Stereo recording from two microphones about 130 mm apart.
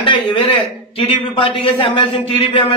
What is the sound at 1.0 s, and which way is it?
A man's voice, 40° left (ahead or behind).